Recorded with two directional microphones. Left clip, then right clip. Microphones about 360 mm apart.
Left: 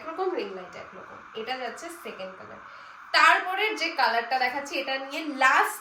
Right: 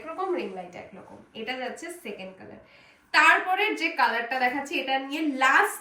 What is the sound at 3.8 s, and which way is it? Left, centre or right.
Speech, centre.